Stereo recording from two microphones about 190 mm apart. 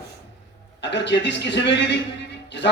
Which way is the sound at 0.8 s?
65° left (ahead or behind).